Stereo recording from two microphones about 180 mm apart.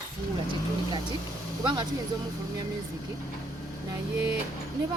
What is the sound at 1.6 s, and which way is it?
Speech, 25° right (ahead or behind).